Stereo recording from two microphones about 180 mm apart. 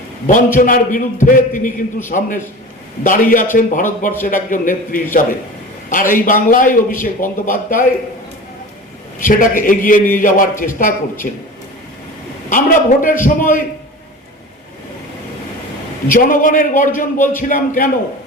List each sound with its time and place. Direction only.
0.3 s a man's voice: 45° left (ahead or behind)
9.2 s a man's voice: 50° left (ahead or behind)
12.5 s a man's voice: 50° left (ahead or behind)
16.0 s a man's voice: 45° left (ahead or behind)